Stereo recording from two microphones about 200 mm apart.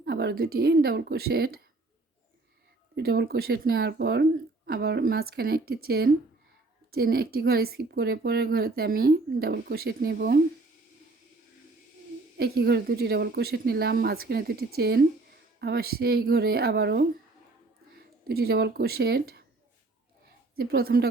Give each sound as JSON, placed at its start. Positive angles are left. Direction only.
{"t": 0.0, "sound": "speech", "side_deg": -55}
{"t": 2.9, "sound": "speech", "side_deg": -55}
{"t": 12.4, "sound": "speech", "side_deg": -55}
{"t": 18.3, "sound": "speech", "side_deg": -50}
{"t": 20.6, "sound": "speech", "side_deg": -50}